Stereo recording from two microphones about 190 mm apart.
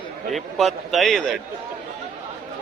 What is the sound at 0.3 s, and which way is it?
A man's voice, centre (ahead or behind).